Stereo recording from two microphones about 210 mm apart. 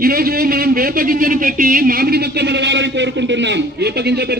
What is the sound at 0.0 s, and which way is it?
A man's voice, 45° right (ahead or behind).